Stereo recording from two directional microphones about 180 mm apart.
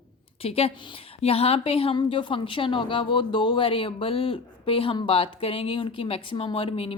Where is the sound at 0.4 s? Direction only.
35° left (ahead or behind).